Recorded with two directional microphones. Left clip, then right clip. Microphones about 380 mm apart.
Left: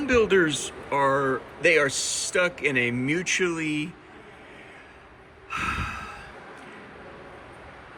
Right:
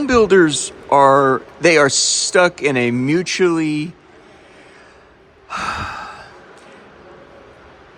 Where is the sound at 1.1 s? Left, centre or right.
Right.